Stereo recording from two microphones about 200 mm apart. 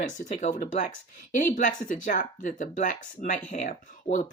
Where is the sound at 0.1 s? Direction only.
40° left (ahead or behind).